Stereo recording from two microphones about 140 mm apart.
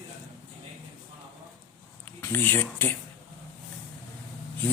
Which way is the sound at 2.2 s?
15° left (ahead or behind).